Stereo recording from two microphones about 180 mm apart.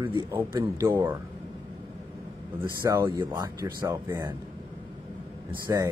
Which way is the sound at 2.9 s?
15° right (ahead or behind).